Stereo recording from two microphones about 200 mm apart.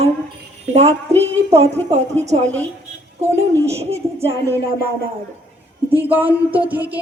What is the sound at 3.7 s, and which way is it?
Speech, 30° right (ahead or behind).